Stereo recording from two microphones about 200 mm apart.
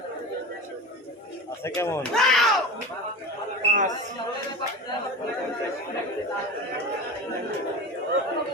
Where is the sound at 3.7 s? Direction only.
40° right (ahead or behind).